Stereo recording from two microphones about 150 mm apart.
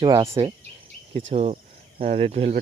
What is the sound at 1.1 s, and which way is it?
Speech, 45° right (ahead or behind).